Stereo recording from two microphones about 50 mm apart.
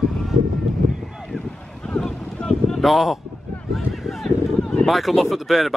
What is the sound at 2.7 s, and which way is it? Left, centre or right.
Speech, centre.